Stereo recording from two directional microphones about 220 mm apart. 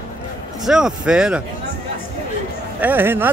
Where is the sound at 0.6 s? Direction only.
Centre (ahead or behind).